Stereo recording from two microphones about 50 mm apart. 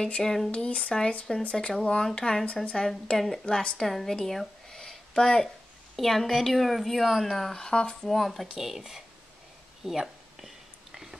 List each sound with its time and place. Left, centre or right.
0.0 s a woman's voice: centre
8.1 s a woman's voice: centre
9.8 s a sound: centre